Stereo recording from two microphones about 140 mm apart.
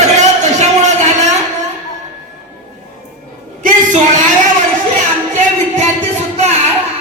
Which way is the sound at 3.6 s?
65° right (ahead or behind).